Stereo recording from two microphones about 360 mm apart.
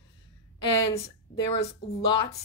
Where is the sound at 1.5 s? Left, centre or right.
Centre.